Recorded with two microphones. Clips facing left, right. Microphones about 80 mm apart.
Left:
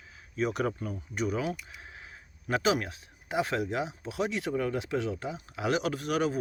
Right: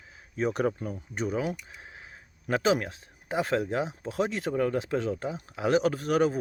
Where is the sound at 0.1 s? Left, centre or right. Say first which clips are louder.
Right 2 dB; right.